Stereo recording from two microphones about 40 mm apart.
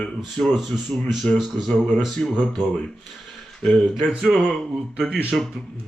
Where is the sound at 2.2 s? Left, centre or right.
Centre.